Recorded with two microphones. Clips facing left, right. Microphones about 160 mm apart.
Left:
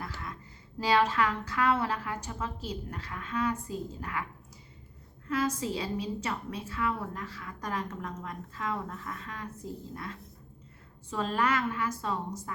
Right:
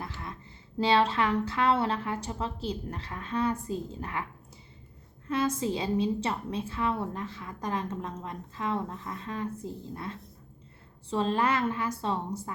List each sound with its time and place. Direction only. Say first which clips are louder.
0.0 s a sound: right 1 dB; 25° right (ahead or behind)
0.8 s a woman's voice: right 1 dB; 30° right (ahead or behind)
5.3 s a woman's voice: right 2 dB; 25° right (ahead or behind)